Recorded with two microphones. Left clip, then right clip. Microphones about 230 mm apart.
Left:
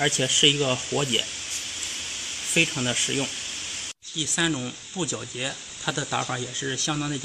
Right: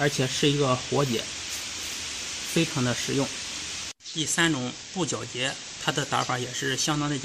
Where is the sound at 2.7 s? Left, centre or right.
Right.